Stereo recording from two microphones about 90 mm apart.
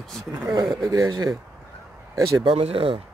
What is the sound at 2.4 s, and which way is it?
Speech, 90° right.